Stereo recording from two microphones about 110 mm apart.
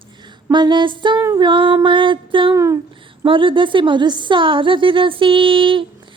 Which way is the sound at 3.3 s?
50° right (ahead or behind).